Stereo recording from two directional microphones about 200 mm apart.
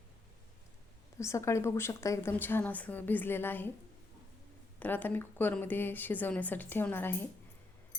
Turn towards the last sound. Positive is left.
turn(degrees=10)  # may be behind; listen again after turning